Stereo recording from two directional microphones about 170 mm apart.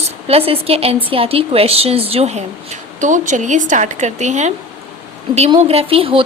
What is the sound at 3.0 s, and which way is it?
A woman's voice, 45° right (ahead or behind).